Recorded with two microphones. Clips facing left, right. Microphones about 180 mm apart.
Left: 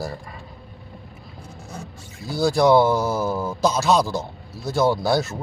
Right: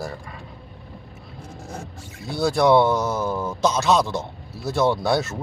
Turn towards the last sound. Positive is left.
turn(degrees=0)  # may be behind; listen again after turning